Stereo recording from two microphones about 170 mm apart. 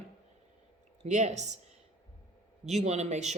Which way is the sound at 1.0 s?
45° right (ahead or behind).